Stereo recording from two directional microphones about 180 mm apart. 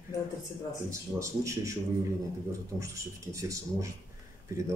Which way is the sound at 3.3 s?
15° right (ahead or behind).